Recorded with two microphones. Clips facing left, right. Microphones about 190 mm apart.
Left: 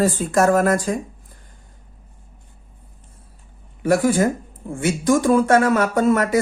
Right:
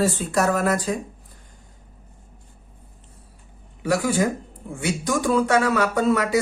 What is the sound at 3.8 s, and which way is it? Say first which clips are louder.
Speech: left 4 dB; 50° left (ahead or behind).